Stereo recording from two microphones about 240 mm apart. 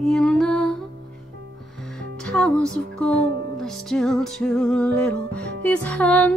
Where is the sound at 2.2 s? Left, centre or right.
Centre.